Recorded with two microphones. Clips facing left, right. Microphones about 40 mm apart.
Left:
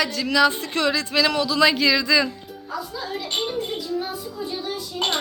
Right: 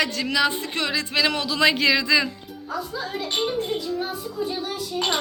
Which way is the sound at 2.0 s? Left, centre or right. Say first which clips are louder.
Left 1 dB; right.